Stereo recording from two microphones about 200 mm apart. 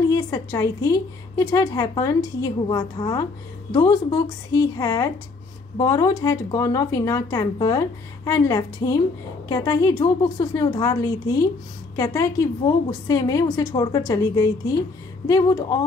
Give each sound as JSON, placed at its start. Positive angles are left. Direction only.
{"t": 0.1, "sound": "a woman's voice", "side_deg": 20}